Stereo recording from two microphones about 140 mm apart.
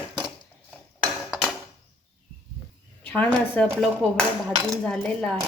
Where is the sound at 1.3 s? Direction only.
Centre (ahead or behind).